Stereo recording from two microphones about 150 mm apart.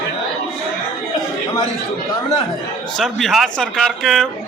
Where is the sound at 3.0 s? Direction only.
Centre (ahead or behind).